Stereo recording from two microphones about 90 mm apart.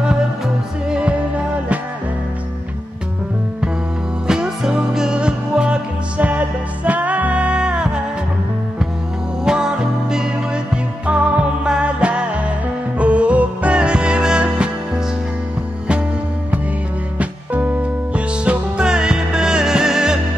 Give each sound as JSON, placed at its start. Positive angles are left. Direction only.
{"t": 0.8, "sound": "music", "side_deg": -10}
{"t": 4.3, "sound": "music", "side_deg": -5}
{"t": 9.4, "sound": "music", "side_deg": -5}
{"t": 17.2, "sound": "music", "side_deg": -15}